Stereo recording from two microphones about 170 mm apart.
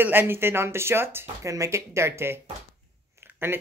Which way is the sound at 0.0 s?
10° right (ahead or behind).